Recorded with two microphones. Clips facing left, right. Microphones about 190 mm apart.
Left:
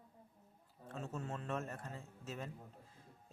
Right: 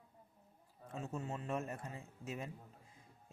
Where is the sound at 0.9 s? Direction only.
10° right (ahead or behind).